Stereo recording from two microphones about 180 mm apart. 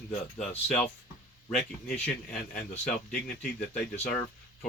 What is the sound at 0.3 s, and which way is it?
Speech, 5° left (ahead or behind).